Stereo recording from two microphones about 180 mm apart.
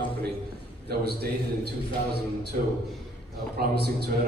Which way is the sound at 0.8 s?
65° right (ahead or behind).